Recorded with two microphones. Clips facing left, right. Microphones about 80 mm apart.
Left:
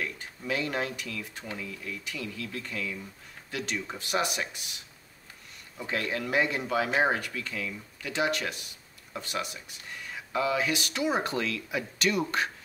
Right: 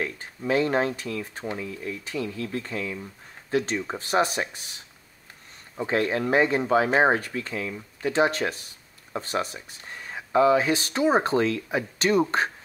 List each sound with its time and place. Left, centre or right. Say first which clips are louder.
0.0 s speech: right 6 dB; right